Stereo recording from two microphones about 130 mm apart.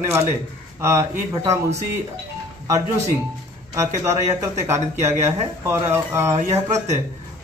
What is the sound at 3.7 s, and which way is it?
A man's voice, 25° right (ahead or behind).